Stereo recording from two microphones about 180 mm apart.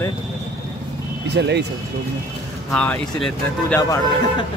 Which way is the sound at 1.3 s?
70° right (ahead or behind).